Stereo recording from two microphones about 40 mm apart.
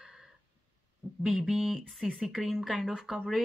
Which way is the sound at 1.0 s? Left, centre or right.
Right.